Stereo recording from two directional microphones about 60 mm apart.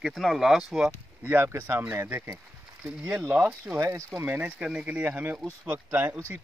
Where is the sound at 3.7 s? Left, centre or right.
Right.